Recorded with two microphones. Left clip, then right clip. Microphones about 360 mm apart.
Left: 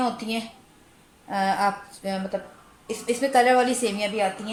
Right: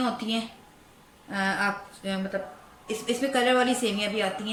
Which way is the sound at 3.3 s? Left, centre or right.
Centre.